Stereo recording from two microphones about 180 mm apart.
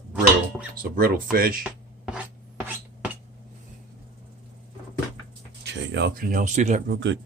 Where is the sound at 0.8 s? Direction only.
55° right (ahead or behind).